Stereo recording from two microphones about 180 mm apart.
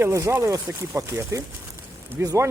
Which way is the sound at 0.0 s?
15° right (ahead or behind).